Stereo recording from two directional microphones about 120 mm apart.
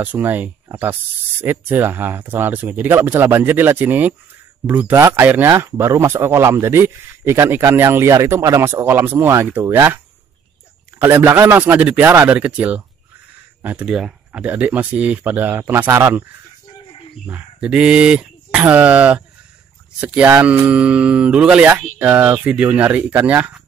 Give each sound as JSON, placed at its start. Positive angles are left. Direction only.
{"t": 0.0, "sound": "speech", "side_deg": -15}
{"t": 11.0, "sound": "speech", "side_deg": -20}
{"t": 17.3, "sound": "speech", "side_deg": -10}